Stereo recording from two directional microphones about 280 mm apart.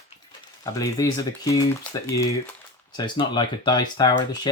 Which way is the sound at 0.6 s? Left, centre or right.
Centre.